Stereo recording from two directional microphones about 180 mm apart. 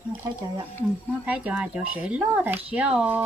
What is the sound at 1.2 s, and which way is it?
Speech, 5° right (ahead or behind).